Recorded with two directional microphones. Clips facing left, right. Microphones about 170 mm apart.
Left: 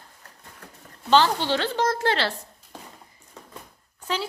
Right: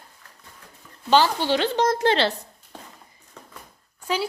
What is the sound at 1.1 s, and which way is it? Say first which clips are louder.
A woman's voice: right 1 dB; 10° right (ahead or behind).